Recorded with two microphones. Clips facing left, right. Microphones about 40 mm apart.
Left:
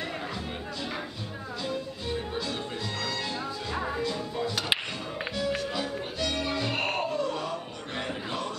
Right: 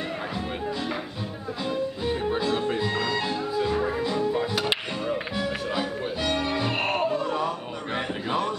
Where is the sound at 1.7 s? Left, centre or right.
Right.